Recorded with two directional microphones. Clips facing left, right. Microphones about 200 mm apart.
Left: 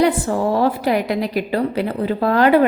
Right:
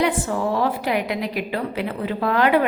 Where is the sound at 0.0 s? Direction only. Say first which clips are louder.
Left 4 dB; 35° left (ahead or behind).